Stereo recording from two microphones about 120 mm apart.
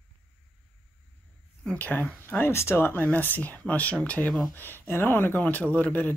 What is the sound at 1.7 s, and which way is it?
Speech, 15° left (ahead or behind).